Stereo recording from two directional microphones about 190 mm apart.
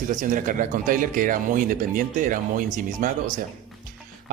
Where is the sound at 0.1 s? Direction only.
45° right (ahead or behind).